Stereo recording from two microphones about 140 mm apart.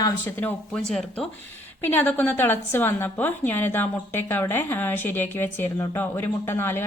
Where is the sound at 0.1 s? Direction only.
15° left (ahead or behind).